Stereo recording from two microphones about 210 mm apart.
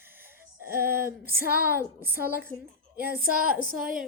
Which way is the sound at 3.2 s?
45° right (ahead or behind).